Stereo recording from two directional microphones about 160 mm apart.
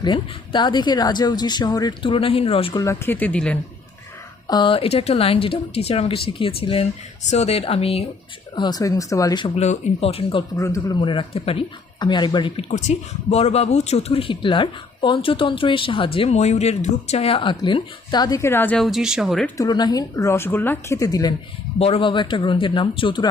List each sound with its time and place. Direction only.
0.0 s speech: 30° left (ahead or behind)
2.7 s speech: 15° left (ahead or behind)
4.4 s speech: 30° left (ahead or behind)
8.5 s speech: 25° left (ahead or behind)
9.6 s speech: 45° left (ahead or behind)
10.6 s speech: 20° left (ahead or behind)
11.0 s speech: 30° left (ahead or behind)
12.7 s speech: 40° left (ahead or behind); by 18.9 s 10° left (ahead or behind)
18.9 s speech: 5° right (ahead or behind)
19.5 s speech: 25° left (ahead or behind)
21.8 s speech: 35° left (ahead or behind)